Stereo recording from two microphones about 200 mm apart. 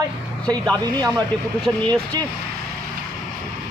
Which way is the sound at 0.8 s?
20° right (ahead or behind).